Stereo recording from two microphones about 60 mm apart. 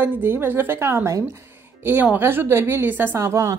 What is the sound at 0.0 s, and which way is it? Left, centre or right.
A woman's voice, right.